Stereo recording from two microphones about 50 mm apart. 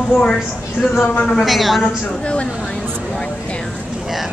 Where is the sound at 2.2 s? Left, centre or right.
Left.